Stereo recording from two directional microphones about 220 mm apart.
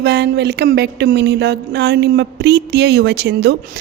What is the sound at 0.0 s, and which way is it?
A woman's voice, 50° right (ahead or behind).